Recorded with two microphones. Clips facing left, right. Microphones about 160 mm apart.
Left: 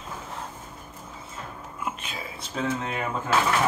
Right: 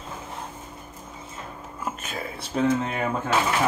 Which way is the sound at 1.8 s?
50° right (ahead or behind).